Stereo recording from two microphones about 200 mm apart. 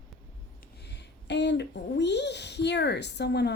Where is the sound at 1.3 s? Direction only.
60° left (ahead or behind).